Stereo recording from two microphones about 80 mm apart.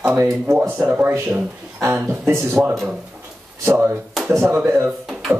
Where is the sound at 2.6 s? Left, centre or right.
Right.